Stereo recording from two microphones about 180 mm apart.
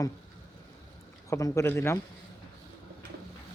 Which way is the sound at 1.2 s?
15° left (ahead or behind).